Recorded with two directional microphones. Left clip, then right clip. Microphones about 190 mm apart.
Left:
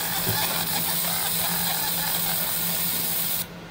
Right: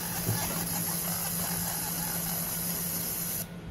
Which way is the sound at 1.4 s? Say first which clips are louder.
Left 9 dB; 30° left (ahead or behind).